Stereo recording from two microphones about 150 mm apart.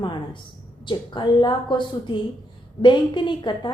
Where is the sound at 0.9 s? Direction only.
30° left (ahead or behind).